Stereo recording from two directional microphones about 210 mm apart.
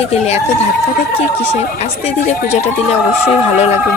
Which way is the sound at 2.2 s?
35° left (ahead or behind).